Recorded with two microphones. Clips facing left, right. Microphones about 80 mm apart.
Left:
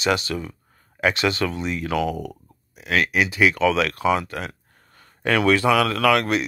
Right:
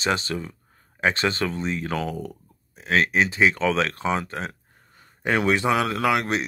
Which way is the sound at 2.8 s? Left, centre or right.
Right.